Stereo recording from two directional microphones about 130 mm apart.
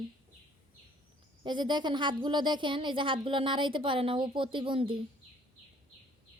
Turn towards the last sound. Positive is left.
turn(degrees=-40)  # may be behind; listen again after turning